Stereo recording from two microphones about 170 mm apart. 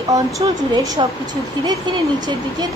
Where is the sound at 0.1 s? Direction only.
20° right (ahead or behind).